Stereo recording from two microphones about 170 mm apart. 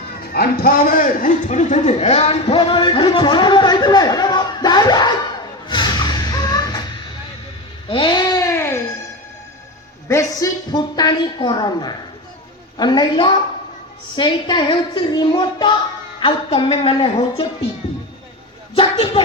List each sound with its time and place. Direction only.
0.3 s a man's voice: 60° left (ahead or behind); by 5.1 s 25° left (ahead or behind)
5.6 s music: 25° left (ahead or behind)
7.9 s a sound: 30° left (ahead or behind)
10.1 s a man's voice: 20° left (ahead or behind)
18.8 s a woman's voice: 35° left (ahead or behind)